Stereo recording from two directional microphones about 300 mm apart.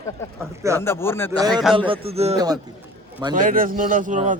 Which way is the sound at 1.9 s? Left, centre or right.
Centre.